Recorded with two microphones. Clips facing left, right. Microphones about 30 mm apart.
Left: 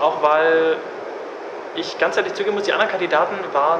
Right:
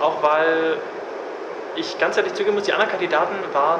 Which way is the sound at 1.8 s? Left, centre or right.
Centre.